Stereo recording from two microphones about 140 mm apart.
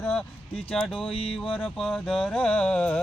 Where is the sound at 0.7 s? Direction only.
5° left (ahead or behind).